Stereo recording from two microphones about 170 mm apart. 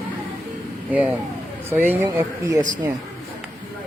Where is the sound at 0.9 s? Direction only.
10° right (ahead or behind).